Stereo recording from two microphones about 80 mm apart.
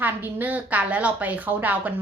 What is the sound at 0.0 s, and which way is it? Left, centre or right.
A woman's voice, right.